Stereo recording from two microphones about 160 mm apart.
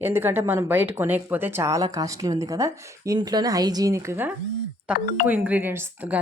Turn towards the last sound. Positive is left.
turn(degrees=-10)  # may be behind; listen again after turning